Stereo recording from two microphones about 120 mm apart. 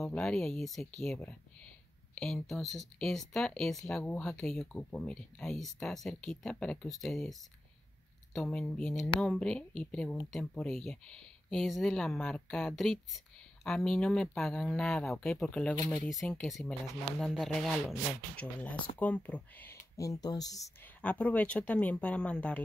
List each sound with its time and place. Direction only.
0.0 s speech: 5° left (ahead or behind)
18.3 s speech: 10° left (ahead or behind)
20.0 s speech: 30° left (ahead or behind)
20.8 s speech: 10° left (ahead or behind)